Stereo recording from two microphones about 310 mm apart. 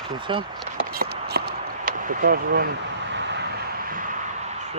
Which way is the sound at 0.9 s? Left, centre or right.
Right.